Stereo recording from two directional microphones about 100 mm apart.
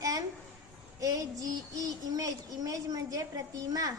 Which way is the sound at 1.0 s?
35° right (ahead or behind).